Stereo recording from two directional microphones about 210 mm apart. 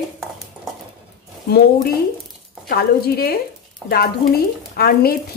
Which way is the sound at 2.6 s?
45° left (ahead or behind).